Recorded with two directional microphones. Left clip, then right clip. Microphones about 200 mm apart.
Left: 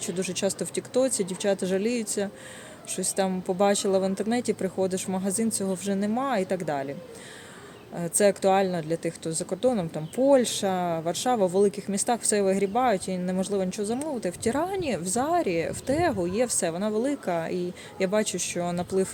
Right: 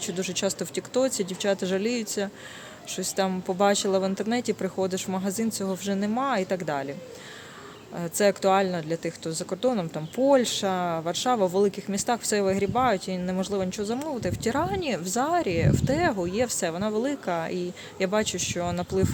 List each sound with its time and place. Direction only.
0.0 s speech: 5° left (ahead or behind)
7.9 s speech: 5° left (ahead or behind)